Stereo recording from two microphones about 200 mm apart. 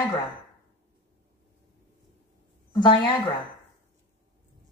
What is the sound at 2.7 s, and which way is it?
Speech, 25° left (ahead or behind).